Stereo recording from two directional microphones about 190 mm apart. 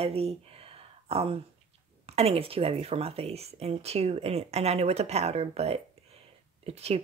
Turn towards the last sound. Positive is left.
turn(degrees=-35)  # may be behind; listen again after turning